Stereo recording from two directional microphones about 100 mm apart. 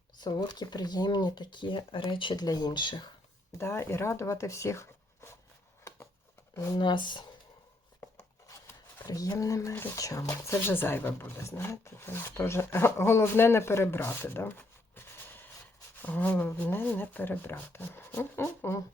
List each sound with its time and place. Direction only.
0.2 s speech: 45° left (ahead or behind)
3.6 s speech: 25° left (ahead or behind)
6.7 s speech: 50° left (ahead or behind)
8.1 s a sound: 35° left (ahead or behind)
9.0 s speech: 35° left (ahead or behind)